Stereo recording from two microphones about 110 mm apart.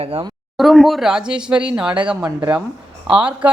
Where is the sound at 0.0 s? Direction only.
60° right (ahead or behind).